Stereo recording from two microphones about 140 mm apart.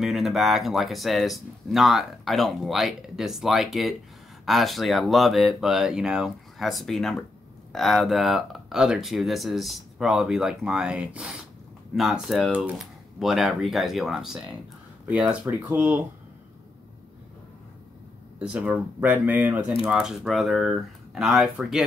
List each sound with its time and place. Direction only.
0.0 s speech: centre (ahead or behind)
18.4 s speech: 10° right (ahead or behind)